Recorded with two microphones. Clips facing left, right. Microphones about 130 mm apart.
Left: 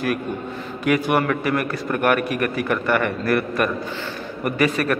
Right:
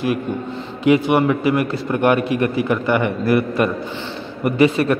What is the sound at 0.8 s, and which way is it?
A man's voice, 20° right (ahead or behind).